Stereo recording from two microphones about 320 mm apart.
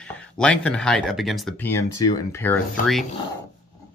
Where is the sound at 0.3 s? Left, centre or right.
Centre.